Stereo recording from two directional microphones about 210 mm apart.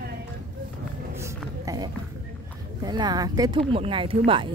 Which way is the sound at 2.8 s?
20° right (ahead or behind).